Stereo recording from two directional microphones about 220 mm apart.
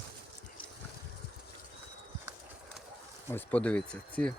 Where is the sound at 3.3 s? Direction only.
5° left (ahead or behind).